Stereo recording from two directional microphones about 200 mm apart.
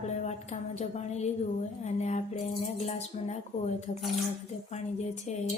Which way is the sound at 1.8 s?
35° left (ahead or behind).